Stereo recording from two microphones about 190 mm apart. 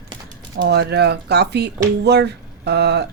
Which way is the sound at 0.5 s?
60° right (ahead or behind).